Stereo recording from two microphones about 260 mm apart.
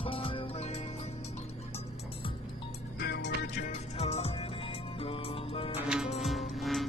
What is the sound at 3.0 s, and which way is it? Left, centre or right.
Music, left.